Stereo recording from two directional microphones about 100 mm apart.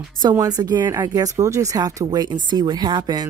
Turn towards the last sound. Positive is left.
turn(degrees=-45)  # may be behind; listen again after turning